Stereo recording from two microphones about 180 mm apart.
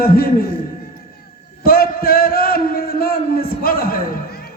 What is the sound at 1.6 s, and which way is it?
A man's voice, 55° left (ahead or behind).